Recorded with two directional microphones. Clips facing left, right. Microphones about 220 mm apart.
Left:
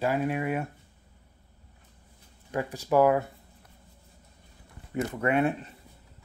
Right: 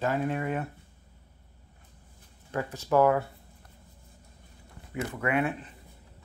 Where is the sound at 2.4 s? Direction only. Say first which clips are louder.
Left 1 dB; 15° left (ahead or behind).